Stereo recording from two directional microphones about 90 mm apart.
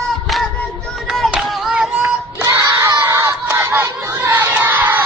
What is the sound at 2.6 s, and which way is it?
Crowd, 40° right (ahead or behind).